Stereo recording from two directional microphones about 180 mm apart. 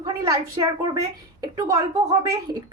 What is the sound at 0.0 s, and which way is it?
A woman's voice, 20° right (ahead or behind).